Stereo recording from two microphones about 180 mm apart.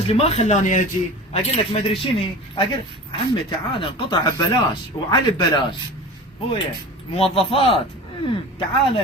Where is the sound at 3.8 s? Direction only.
30° left (ahead or behind).